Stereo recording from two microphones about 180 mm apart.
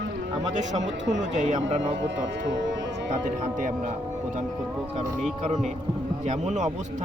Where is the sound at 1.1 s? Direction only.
40° right (ahead or behind).